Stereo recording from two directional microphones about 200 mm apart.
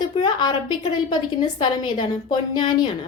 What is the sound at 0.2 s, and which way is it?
A woman's voice, 20° left (ahead or behind).